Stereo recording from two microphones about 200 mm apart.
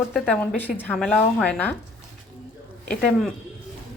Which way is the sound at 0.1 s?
5° left (ahead or behind).